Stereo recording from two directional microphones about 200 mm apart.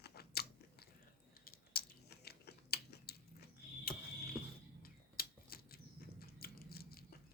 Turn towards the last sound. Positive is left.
turn(degrees=50)  # may be behind; listen again after turning